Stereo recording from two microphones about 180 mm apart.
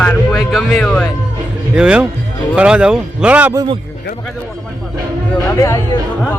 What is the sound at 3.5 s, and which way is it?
Speech, 20° right (ahead or behind).